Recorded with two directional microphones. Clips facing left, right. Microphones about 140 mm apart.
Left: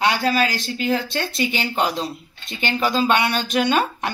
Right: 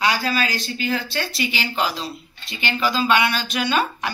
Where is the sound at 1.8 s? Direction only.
20° left (ahead or behind).